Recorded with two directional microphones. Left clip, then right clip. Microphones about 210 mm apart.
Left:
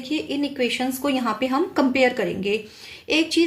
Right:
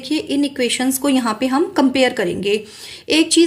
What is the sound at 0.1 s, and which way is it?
A woman's voice, 35° right (ahead or behind).